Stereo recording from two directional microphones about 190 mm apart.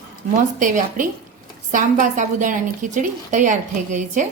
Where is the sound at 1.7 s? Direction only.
40° right (ahead or behind).